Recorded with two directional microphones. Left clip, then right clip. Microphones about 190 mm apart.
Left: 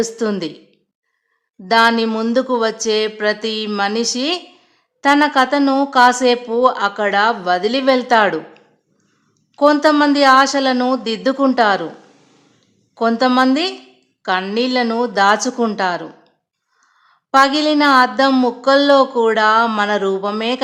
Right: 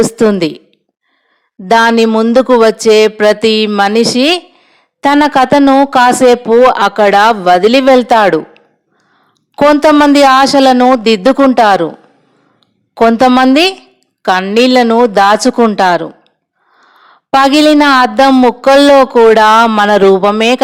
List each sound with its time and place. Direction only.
0.0 s a woman's voice: 35° right (ahead or behind)
1.6 s a woman's voice: 35° right (ahead or behind)
2.0 s speech: 25° right (ahead or behind)
2.3 s a woman's voice: 35° right (ahead or behind)
9.6 s a woman's voice: 40° right (ahead or behind)
12.9 s a woman's voice: 40° right (ahead or behind)